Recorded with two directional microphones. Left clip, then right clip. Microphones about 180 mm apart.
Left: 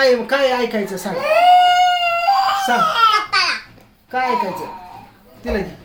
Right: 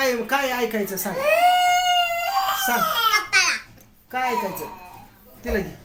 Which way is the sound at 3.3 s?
35° left (ahead or behind).